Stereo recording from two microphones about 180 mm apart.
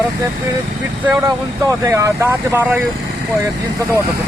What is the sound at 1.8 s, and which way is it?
Speech, 15° right (ahead or behind).